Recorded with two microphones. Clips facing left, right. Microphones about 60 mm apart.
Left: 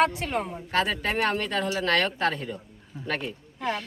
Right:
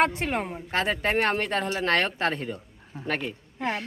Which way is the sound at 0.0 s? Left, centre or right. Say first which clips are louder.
Even; right.